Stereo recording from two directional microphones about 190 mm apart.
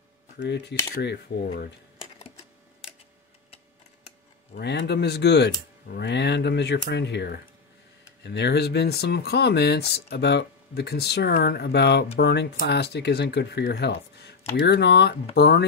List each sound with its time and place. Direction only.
0.4 s speech: 65° left (ahead or behind)
4.6 s speech: 60° left (ahead or behind)